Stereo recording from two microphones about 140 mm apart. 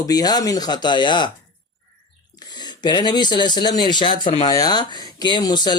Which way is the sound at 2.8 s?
30° left (ahead or behind).